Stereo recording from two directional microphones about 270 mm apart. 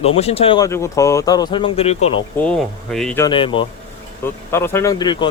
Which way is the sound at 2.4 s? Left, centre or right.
Centre.